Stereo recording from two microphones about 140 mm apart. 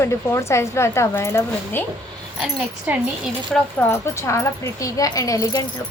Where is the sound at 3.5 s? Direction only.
15° left (ahead or behind).